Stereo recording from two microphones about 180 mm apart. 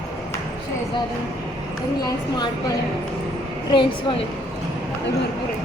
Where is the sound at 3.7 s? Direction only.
30° left (ahead or behind).